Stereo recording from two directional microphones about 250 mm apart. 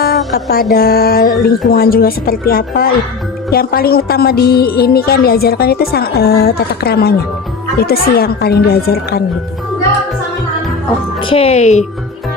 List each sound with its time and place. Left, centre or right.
0.0 s music: left
1.7 s a woman's voice: left
11.2 s speech: left